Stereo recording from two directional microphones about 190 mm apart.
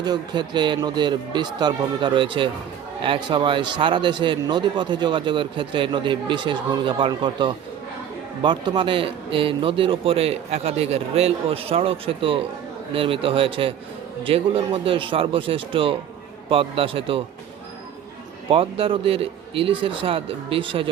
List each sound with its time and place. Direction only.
0.0 s a man's voice: 20° right (ahead or behind)
18.5 s a man's voice: 30° right (ahead or behind)